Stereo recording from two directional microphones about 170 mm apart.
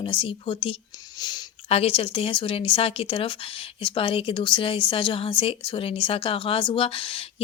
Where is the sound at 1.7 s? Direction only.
35° left (ahead or behind).